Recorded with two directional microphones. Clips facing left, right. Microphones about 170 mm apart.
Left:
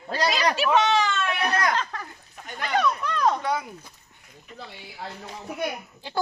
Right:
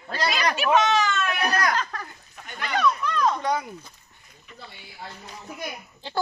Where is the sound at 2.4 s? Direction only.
40° left (ahead or behind).